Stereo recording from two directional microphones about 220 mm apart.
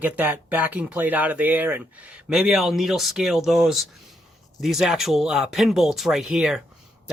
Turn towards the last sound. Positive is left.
turn(degrees=0)  # may be behind; listen again after turning